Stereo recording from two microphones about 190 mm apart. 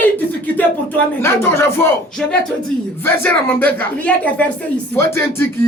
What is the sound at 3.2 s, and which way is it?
Speech, 10° left (ahead or behind).